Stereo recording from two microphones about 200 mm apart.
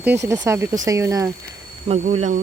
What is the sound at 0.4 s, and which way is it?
Speech, 15° right (ahead or behind).